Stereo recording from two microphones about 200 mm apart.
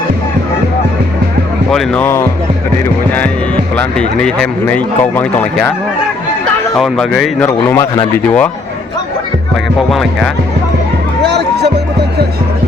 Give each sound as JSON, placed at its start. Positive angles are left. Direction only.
{"t": 1.7, "sound": "speech", "side_deg": 5}
{"t": 3.8, "sound": "speech", "side_deg": 5}
{"t": 6.7, "sound": "speech", "side_deg": 0}
{"t": 7.4, "sound": "speech", "side_deg": 15}
{"t": 9.9, "sound": "speech", "side_deg": 0}
{"t": 11.2, "sound": "music", "side_deg": -55}